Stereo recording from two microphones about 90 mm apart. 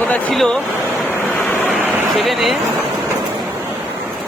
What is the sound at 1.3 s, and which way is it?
Vehicle, 20° left (ahead or behind).